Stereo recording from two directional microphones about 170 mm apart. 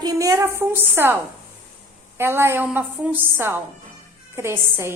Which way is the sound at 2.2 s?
15° right (ahead or behind).